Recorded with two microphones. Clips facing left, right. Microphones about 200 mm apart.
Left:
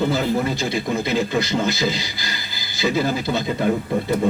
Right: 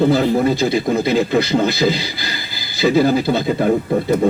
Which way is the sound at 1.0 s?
50° right (ahead or behind).